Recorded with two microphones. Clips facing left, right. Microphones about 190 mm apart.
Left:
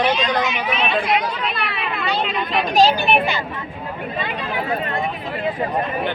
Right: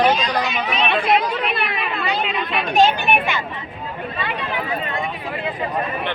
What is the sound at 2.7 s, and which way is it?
Speech, 35° left (ahead or behind).